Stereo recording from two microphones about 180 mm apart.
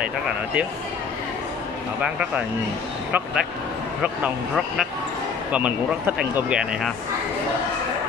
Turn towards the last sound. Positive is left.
turn(degrees=-5)  # may be behind; listen again after turning